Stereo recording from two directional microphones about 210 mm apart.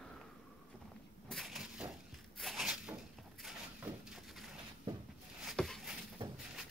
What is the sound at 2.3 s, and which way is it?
Cupboard open or close, centre (ahead or behind).